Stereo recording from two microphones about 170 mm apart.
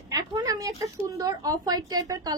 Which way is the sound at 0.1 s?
25° right (ahead or behind).